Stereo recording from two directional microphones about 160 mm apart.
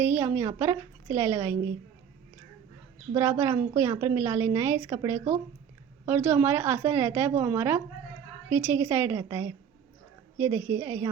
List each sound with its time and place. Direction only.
0.0 s a woman's voice: 15° right (ahead or behind)
3.2 s a woman's voice: 15° right (ahead or behind)